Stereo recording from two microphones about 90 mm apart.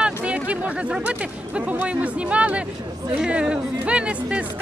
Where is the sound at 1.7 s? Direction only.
15° right (ahead or behind).